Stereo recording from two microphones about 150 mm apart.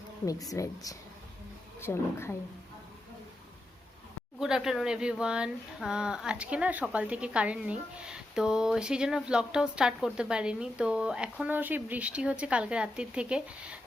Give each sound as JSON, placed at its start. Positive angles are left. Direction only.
{"t": 0.5, "sound": "a woman's voice", "side_deg": 20}
{"t": 4.4, "sound": "speech", "side_deg": -5}